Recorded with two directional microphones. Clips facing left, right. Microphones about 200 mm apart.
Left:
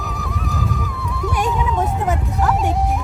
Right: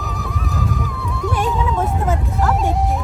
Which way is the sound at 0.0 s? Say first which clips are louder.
Even; centre (ahead or behind).